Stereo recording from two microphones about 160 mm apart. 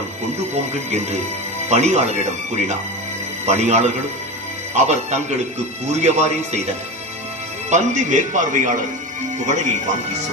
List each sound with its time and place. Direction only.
0.3 s a man's voice: 45° right (ahead or behind)